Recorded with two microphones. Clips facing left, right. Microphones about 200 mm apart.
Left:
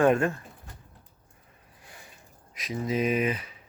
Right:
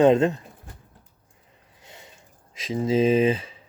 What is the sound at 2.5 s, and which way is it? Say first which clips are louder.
Speech: right 7 dB; 25° right (ahead or behind).